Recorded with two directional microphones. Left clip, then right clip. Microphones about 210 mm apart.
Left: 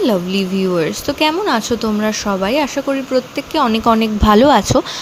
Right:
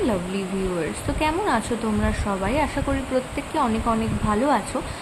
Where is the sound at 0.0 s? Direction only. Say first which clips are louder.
Left 8 dB; 30° left (ahead or behind).